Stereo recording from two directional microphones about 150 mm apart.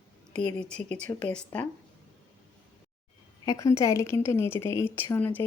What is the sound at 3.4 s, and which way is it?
A woman's voice, 20° left (ahead or behind).